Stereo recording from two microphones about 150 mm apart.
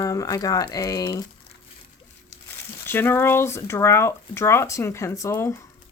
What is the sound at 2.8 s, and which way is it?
A woman's voice, 15° left (ahead or behind).